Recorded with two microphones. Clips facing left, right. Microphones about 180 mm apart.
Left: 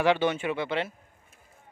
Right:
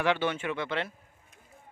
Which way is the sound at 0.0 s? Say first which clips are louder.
Left 4 dB; 15° left (ahead or behind).